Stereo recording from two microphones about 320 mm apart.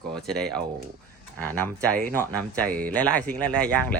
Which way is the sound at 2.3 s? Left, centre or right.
Centre.